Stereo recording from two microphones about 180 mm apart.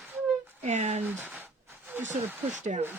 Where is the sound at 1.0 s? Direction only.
10° right (ahead or behind).